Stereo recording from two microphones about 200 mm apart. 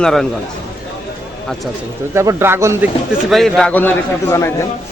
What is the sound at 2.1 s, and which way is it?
Speech, 15° right (ahead or behind).